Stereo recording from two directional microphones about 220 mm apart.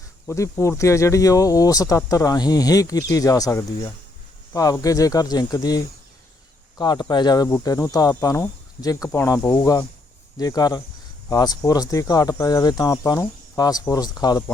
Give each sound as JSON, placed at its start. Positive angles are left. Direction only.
{"t": 0.3, "sound": "speech", "side_deg": 15}